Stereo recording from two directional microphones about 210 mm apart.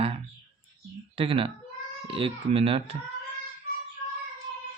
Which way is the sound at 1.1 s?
25° right (ahead or behind).